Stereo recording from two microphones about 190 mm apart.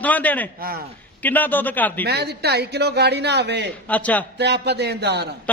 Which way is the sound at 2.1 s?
60° right (ahead or behind).